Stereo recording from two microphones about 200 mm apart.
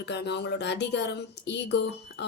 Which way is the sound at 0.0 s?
55° left (ahead or behind).